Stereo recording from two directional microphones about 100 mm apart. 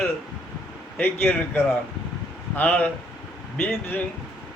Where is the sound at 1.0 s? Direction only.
20° left (ahead or behind).